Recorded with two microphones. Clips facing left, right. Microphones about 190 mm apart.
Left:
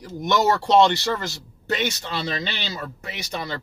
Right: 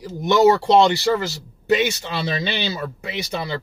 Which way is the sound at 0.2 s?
10° right (ahead or behind).